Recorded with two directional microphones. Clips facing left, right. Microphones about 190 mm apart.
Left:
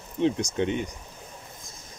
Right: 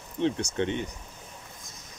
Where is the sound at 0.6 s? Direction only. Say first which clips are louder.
Left 2 dB; 15° left (ahead or behind).